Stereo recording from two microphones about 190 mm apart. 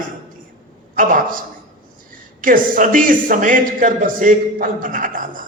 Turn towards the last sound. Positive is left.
turn(degrees=-45)  # may be behind; listen again after turning